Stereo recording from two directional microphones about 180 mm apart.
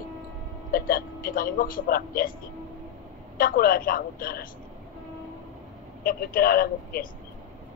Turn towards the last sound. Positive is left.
turn(degrees=55)  # may be behind; listen again after turning